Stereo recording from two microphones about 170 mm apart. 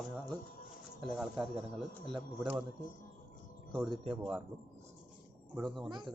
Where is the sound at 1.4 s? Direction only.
Centre (ahead or behind).